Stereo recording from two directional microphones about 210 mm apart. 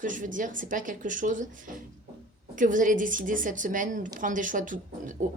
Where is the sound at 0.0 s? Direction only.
40° right (ahead or behind).